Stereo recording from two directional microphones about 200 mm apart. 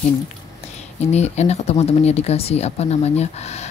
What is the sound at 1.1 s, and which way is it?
Speech, 35° left (ahead or behind).